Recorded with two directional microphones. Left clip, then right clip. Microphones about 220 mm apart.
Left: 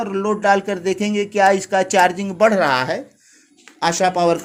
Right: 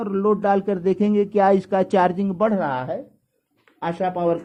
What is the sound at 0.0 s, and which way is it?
Speech, 10° right (ahead or behind).